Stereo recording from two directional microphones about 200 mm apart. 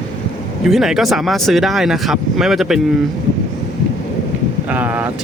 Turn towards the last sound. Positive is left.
turn(degrees=-10)  # may be behind; listen again after turning